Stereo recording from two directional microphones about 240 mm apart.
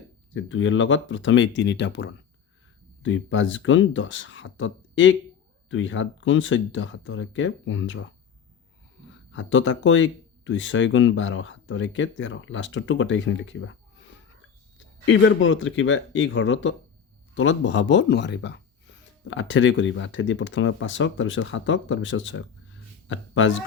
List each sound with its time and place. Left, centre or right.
0.3 s speech: left
9.3 s speech: left
15.0 s speech: left